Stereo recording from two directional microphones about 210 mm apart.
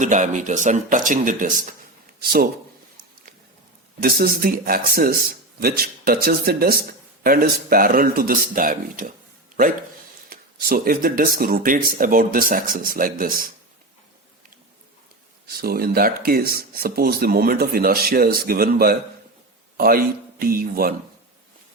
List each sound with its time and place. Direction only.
0.0 s speech: 35° right (ahead or behind)
4.0 s speech: 45° right (ahead or behind)
10.2 s speech: 45° right (ahead or behind)
15.4 s speech: 45° right (ahead or behind)